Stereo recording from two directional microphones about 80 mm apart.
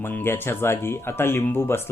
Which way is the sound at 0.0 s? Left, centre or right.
Left.